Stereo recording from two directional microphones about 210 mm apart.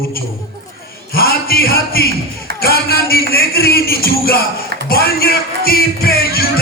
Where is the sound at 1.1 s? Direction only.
45° left (ahead or behind).